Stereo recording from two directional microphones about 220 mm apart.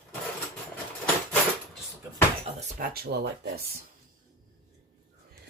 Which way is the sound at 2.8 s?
45° right (ahead or behind).